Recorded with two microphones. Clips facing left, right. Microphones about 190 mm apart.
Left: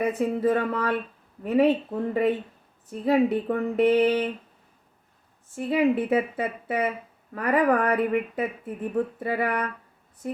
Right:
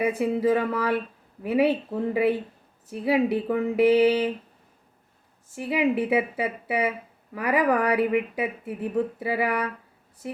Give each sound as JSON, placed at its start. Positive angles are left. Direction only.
{"t": 0.0, "sound": "speech", "side_deg": -10}
{"t": 2.8, "sound": "speech", "side_deg": -10}
{"t": 5.5, "sound": "speech", "side_deg": -10}